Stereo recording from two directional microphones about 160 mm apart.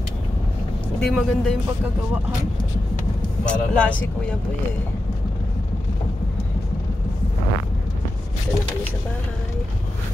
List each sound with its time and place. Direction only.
0.9 s speech: centre (ahead or behind)
3.4 s speech: 5° left (ahead or behind)